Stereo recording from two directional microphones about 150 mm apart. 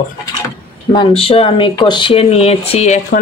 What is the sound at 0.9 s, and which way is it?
Speech, 40° left (ahead or behind).